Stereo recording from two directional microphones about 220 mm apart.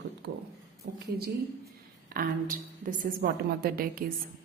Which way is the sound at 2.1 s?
40° right (ahead or behind).